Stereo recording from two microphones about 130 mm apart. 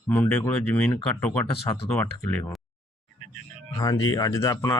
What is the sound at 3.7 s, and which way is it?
Speech, 30° left (ahead or behind).